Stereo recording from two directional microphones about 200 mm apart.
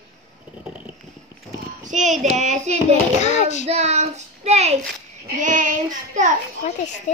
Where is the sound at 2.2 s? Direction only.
35° right (ahead or behind).